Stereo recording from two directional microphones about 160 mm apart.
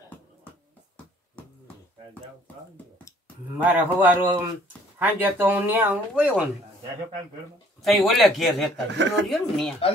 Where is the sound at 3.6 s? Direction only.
10° right (ahead or behind).